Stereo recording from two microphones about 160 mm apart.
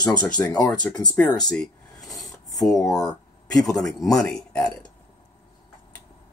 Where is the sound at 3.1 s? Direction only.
5° left (ahead or behind).